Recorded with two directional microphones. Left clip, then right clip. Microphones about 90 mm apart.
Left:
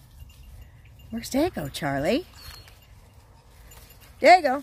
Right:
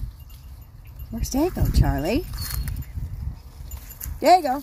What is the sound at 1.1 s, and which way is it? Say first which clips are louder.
Speech: right 1 dB; 5° left (ahead or behind).